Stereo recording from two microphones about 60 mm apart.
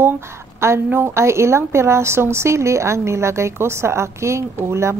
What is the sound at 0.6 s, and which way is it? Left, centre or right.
Speech, right.